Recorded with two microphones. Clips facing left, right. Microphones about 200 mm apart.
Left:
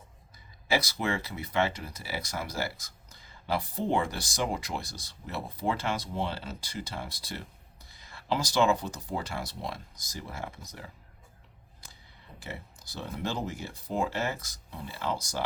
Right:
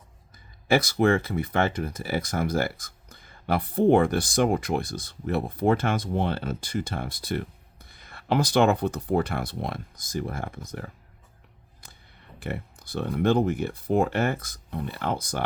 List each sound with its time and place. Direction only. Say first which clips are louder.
0.7 s speech: right 8 dB; 55° right (ahead or behind)
12.4 s speech: right 9 dB; 55° right (ahead or behind)